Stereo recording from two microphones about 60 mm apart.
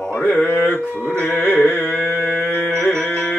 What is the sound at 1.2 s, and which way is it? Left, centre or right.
Music, left.